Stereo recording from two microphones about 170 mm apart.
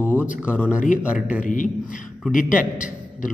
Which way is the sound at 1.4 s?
50° left (ahead or behind).